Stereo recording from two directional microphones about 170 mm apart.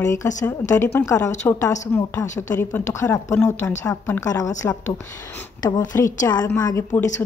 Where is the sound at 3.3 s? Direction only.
5° left (ahead or behind).